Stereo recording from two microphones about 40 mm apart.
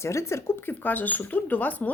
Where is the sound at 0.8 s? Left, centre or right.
Left.